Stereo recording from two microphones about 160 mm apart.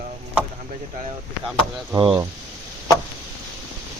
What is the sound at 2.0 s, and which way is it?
Speech, 30° right (ahead or behind).